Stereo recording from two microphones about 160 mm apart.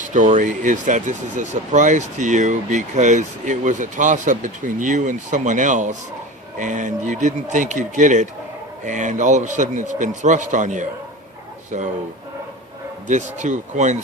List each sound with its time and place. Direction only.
0.1 s speech: 55° right (ahead or behind)
13.1 s speech: 50° right (ahead or behind)